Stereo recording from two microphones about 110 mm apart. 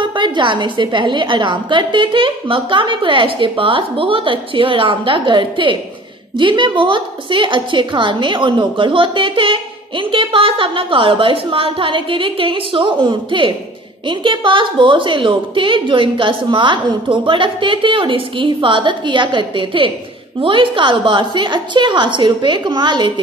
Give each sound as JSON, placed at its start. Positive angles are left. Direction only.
{"t": 0.0, "sound": "a woman's voice", "side_deg": -45}